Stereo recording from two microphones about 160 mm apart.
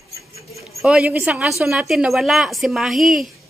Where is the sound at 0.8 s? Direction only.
5° right (ahead or behind).